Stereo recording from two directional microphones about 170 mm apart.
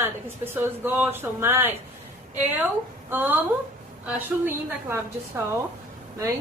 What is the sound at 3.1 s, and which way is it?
A woman's voice, 10° right (ahead or behind).